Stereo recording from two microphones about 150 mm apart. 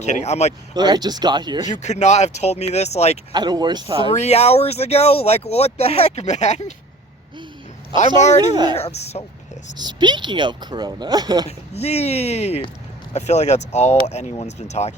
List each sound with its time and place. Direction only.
0.0 s speech: 50° left (ahead or behind)
0.7 s speech: 30° right (ahead or behind)
1.6 s speech: 50° left (ahead or behind)
3.3 s speech: 30° right (ahead or behind)
4.2 s speech: 45° left (ahead or behind)
7.9 s speech: 50° left (ahead or behind)
9.7 s speech: 30° right (ahead or behind)
11.4 s speech: 45° left (ahead or behind)